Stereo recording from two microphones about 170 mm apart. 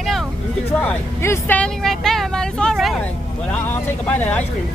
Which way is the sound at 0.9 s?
15° left (ahead or behind).